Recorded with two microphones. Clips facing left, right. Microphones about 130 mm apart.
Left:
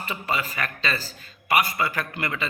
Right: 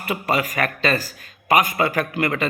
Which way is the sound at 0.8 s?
45° right (ahead or behind).